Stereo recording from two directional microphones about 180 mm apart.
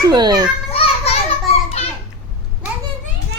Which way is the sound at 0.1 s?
25° right (ahead or behind).